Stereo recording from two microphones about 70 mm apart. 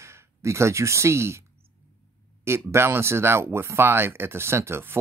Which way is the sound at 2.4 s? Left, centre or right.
Right.